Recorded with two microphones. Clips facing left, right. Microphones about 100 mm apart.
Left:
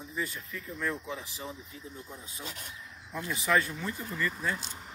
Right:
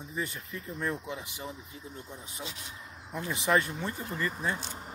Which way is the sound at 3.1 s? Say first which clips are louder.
Right 1 dB; 50° right (ahead or behind).